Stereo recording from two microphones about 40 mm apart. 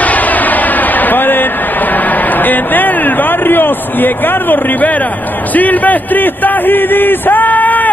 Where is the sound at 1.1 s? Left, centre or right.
Left.